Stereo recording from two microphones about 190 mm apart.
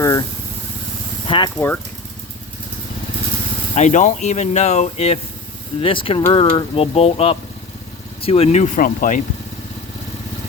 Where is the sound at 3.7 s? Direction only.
40° left (ahead or behind).